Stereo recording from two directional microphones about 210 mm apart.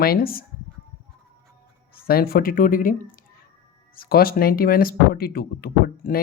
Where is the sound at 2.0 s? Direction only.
45° left (ahead or behind).